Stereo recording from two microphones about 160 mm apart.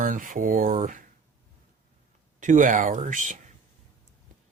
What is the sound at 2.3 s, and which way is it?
Speech, 55° right (ahead or behind).